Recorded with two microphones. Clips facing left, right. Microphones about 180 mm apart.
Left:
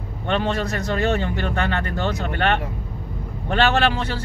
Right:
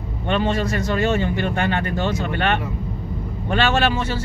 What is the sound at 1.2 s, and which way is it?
Speech, 15° right (ahead or behind).